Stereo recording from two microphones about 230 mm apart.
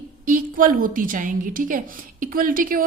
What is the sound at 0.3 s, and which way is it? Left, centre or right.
A woman's voice, right.